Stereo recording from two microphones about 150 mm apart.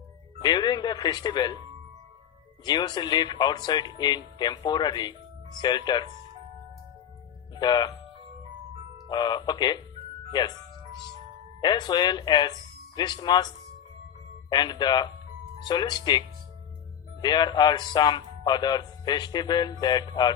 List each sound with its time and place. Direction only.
0.3 s speech: 30° left (ahead or behind)
2.6 s speech: 30° left (ahead or behind)
7.5 s speech: 30° left (ahead or behind)
9.0 s speech: 30° left (ahead or behind)
11.6 s speech: 30° left (ahead or behind)
14.5 s speech: 30° left (ahead or behind)